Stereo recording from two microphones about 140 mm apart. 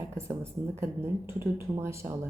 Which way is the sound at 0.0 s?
20° right (ahead or behind).